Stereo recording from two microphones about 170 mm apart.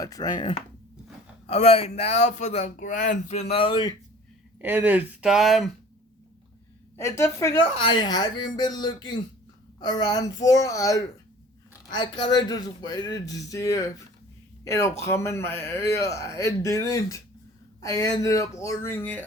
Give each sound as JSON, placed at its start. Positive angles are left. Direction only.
{"t": 0.0, "sound": "speech", "side_deg": 20}
{"t": 4.6, "sound": "speech", "side_deg": -10}
{"t": 6.9, "sound": "a man's voice", "side_deg": 15}
{"t": 7.8, "sound": "a man's voice", "side_deg": 25}